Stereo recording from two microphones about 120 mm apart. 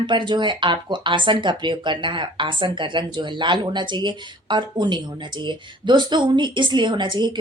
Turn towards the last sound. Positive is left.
turn(degrees=-40)  # may be behind; listen again after turning